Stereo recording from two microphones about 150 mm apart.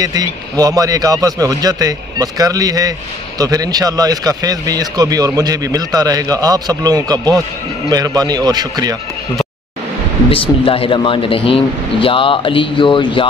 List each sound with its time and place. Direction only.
0.0 s a man's voice: 25° right (ahead or behind)
10.3 s speech: 35° left (ahead or behind)